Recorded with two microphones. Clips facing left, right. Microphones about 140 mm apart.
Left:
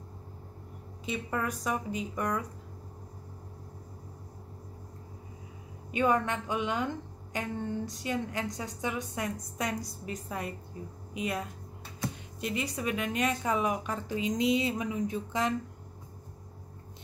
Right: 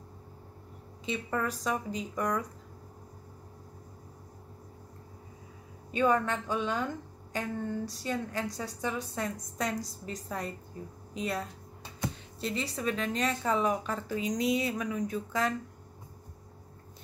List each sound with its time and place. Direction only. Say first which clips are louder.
1.0 s a woman's voice: right 1 dB; 10° left (ahead or behind)
5.9 s a woman's voice: even; 15° left (ahead or behind)